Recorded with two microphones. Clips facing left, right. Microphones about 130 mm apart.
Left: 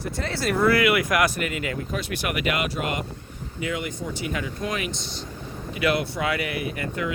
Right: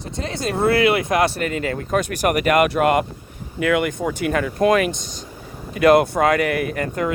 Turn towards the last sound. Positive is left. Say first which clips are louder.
# right 6 dB
turn(degrees=-50)  # may be behind; listen again after turning